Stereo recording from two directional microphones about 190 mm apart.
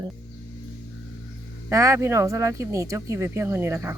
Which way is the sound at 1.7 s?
15° right (ahead or behind).